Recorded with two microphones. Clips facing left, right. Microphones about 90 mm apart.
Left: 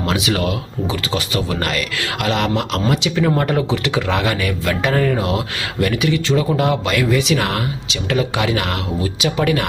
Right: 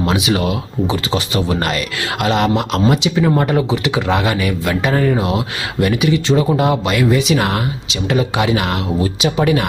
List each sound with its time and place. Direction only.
0.0 s speech: 15° right (ahead or behind)